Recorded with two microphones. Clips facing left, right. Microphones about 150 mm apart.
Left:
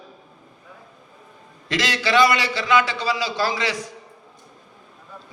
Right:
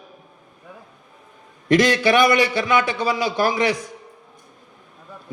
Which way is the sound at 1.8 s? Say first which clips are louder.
Right 1 dB; 50° right (ahead or behind).